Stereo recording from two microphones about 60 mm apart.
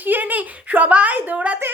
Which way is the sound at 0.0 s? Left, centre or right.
Right.